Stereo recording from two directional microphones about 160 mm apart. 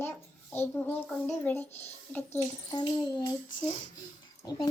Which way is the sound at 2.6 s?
30° left (ahead or behind).